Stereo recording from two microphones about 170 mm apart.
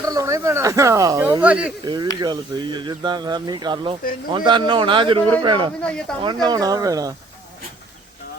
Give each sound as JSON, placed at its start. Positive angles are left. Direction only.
{"t": 0.0, "sound": "speech", "side_deg": -20}
{"t": 1.4, "sound": "speech", "side_deg": -10}
{"t": 1.8, "sound": "speech", "side_deg": -25}
{"t": 5.8, "sound": "speech", "side_deg": 5}
{"t": 6.2, "sound": "speech", "side_deg": -25}